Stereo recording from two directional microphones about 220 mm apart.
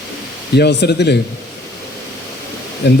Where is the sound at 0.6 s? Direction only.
50° left (ahead or behind).